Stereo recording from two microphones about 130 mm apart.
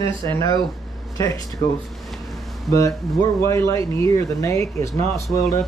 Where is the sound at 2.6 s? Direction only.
25° left (ahead or behind).